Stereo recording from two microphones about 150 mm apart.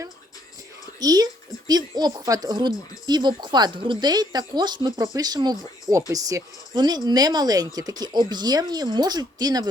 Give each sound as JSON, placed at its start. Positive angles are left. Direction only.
{"t": 0.9, "sound": "speech", "side_deg": -25}